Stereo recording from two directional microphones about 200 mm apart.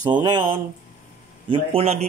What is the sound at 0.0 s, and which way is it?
Speech, 20° right (ahead or behind).